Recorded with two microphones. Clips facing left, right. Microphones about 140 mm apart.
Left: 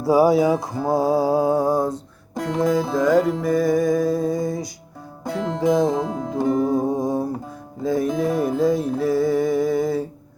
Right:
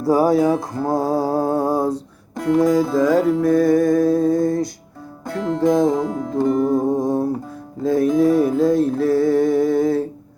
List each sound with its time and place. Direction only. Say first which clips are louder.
0.0 s mantra: even; 5° left (ahead or behind)
5.3 s music: right 2 dB; 20° left (ahead or behind)
5.5 s mantra: right 3 dB; centre (ahead or behind)
5.9 s music: right 2 dB; 25° left (ahead or behind)
6.5 s music: right 2 dB; centre (ahead or behind)